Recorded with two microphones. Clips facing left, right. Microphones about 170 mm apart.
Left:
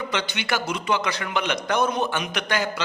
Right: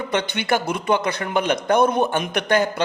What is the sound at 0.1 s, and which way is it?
A woman's voice, 55° right (ahead or behind).